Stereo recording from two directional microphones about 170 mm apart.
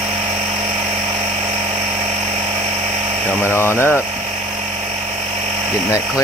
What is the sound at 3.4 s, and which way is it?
Speech, 15° left (ahead or behind).